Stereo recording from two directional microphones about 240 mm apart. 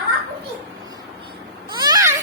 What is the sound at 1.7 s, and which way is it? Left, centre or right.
Babbling, centre.